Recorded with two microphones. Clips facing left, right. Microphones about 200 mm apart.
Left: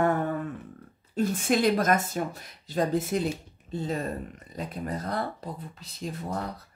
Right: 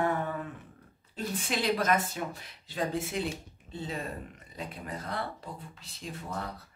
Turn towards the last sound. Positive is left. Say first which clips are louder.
# left 5 dB
turn(degrees=40)  # may be behind; listen again after turning